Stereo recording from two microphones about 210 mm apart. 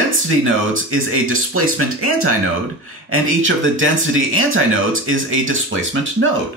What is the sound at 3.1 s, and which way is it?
Speech, 70° right (ahead or behind).